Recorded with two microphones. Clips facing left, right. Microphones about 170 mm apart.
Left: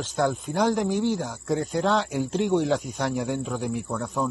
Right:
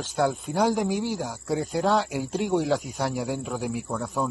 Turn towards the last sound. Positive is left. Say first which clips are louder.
# left 1 dB
turn(degrees=0)  # may be behind; listen again after turning